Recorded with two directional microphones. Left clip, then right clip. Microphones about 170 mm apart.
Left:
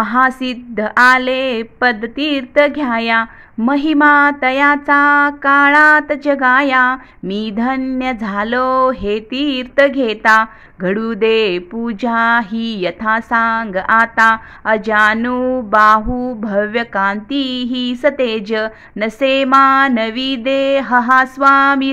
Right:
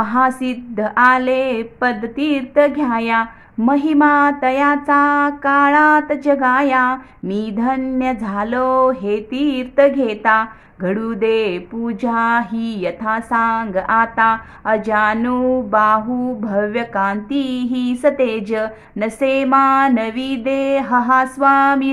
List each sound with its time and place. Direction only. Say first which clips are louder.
0.0 s a woman's voice: left 2 dB; 20° left (ahead or behind)
15.8 s a woman's voice: left 8 dB; 30° left (ahead or behind)